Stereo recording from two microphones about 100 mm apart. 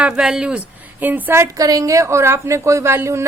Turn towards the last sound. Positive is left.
turn(degrees=-25)  # may be behind; listen again after turning